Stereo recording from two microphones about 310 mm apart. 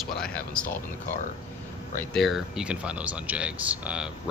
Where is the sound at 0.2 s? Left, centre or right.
Centre.